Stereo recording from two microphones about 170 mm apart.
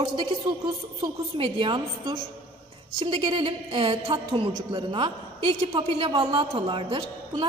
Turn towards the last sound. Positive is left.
turn(degrees=-30)  # may be behind; listen again after turning